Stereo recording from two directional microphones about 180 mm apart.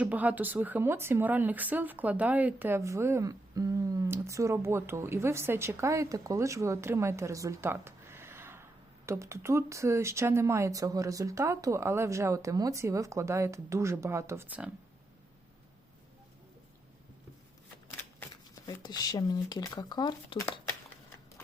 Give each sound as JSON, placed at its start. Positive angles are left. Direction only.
{"t": 0.0, "sound": "speech", "side_deg": -10}
{"t": 18.5, "sound": "speech", "side_deg": 20}